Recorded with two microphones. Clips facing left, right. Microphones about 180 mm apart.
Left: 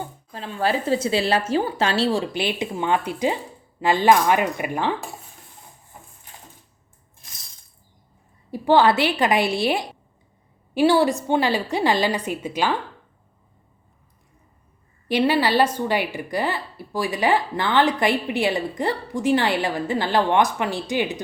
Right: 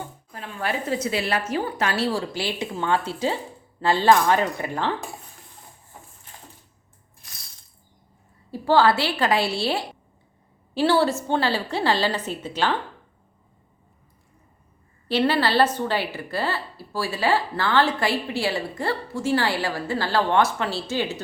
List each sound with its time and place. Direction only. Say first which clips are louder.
0.3 s a woman's voice: left 5 dB; 30° left (ahead or behind)
8.4 s a woman's voice: left 2 dB; 15° left (ahead or behind)
15.0 s a woman's voice: left 2 dB; 15° left (ahead or behind)